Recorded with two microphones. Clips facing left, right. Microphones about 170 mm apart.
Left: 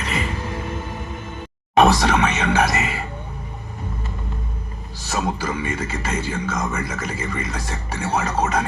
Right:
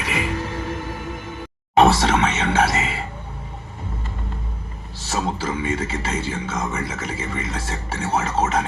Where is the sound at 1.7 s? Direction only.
25° right (ahead or behind).